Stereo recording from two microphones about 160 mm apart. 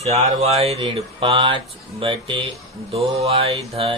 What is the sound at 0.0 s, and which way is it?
Speech, 40° right (ahead or behind).